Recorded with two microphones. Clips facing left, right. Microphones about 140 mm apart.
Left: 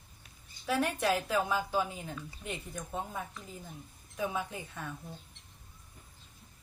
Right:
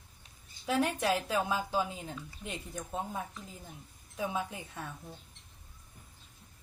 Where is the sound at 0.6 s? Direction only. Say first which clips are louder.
Even; 20° right (ahead or behind).